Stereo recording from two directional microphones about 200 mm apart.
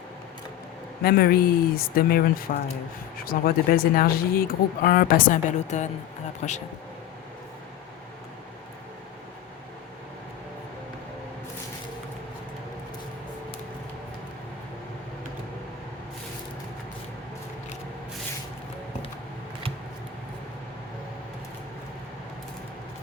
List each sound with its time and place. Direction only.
1.0 s speech: 50° left (ahead or behind)